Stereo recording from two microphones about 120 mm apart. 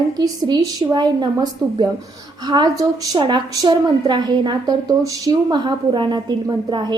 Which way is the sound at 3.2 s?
40° right (ahead or behind).